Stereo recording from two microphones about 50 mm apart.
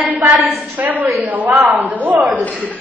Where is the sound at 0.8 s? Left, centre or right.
Right.